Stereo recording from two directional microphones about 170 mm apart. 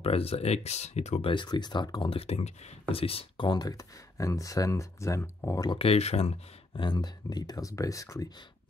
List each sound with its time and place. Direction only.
0.0 s speech: 35° left (ahead or behind); by 5.8 s 20° left (ahead or behind)
5.8 s speech: 35° left (ahead or behind)
6.8 s speech: 25° left (ahead or behind)